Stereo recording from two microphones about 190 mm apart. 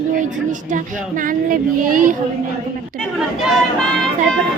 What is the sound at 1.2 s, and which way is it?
Speech, 45° right (ahead or behind).